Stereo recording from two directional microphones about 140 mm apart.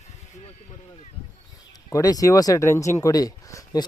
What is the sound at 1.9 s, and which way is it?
Speech, 25° left (ahead or behind).